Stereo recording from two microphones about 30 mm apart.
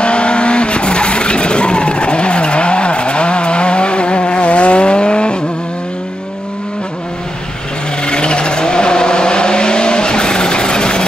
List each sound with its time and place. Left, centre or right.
0.0 s vehicle: left
8.0 s vehicle: left